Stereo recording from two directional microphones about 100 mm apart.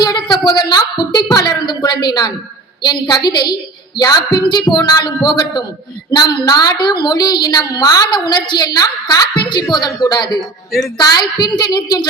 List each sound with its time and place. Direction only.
0.0 s a woman's voice: 45° left (ahead or behind)
10.7 s a woman's voice: centre (ahead or behind)
10.9 s a woman's voice: 40° left (ahead or behind)